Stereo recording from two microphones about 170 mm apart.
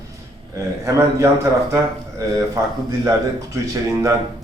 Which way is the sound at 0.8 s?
20° right (ahead or behind).